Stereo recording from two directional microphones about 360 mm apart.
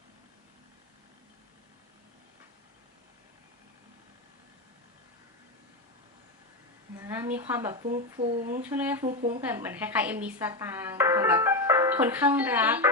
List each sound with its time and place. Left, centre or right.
6.9 s a woman's voice: centre
9.0 s a woman's voice: right
9.4 s speech: centre